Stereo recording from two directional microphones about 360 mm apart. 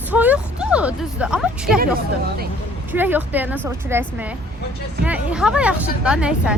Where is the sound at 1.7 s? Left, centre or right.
Right.